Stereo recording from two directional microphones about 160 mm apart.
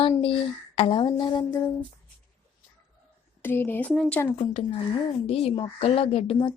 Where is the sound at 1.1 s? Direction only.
30° left (ahead or behind).